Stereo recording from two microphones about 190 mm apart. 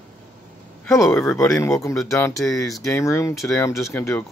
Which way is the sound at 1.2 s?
10° left (ahead or behind).